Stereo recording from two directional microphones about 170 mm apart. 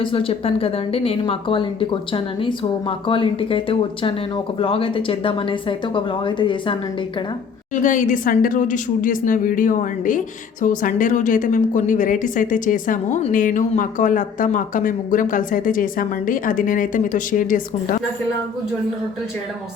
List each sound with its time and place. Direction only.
0.0 s a woman's voice: 30° left (ahead or behind)
7.8 s a woman's voice: 50° left (ahead or behind)